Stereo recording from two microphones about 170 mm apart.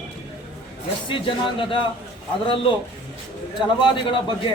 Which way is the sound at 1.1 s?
30° left (ahead or behind).